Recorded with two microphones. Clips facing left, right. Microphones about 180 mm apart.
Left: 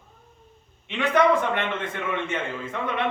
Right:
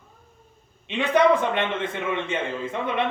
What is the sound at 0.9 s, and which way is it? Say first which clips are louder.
A man's voice: right 1 dB; 15° right (ahead or behind).